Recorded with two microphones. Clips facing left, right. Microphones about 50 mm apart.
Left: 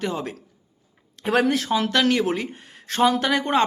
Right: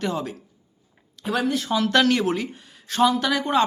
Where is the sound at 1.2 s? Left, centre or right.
Left.